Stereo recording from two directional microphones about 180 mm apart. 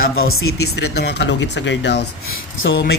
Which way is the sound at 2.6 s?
90° left.